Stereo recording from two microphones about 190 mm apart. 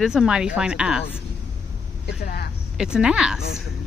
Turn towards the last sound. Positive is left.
turn(degrees=-5)  # may be behind; listen again after turning